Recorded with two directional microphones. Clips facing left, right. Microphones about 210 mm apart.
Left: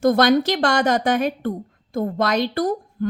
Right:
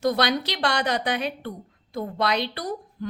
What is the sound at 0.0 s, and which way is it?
A woman's voice, 50° left (ahead or behind).